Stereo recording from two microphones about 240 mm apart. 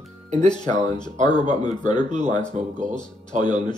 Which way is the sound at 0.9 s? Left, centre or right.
Centre.